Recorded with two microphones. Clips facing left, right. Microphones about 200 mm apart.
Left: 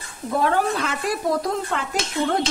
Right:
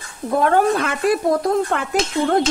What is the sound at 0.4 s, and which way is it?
Speech, 55° right (ahead or behind).